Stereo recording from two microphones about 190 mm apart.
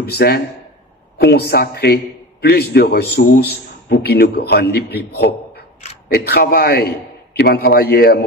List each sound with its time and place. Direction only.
0.0 s a man's voice: 55° left (ahead or behind)